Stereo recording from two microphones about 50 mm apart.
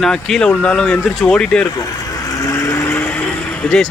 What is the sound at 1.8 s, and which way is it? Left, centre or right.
Vehicle, left.